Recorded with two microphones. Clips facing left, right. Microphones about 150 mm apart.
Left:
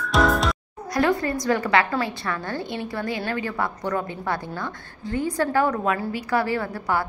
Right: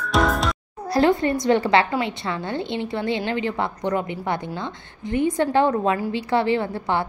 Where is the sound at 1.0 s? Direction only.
25° right (ahead or behind).